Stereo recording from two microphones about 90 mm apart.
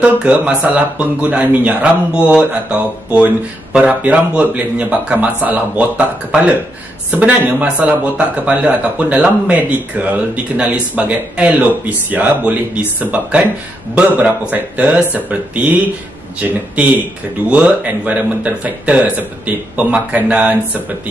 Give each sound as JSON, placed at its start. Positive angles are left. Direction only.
{"t": 0.0, "sound": "speech", "side_deg": -15}
{"t": 17.5, "sound": "speech", "side_deg": -15}